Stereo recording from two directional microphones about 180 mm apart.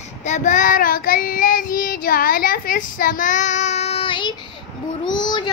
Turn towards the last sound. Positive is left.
turn(degrees=25)  # may be behind; listen again after turning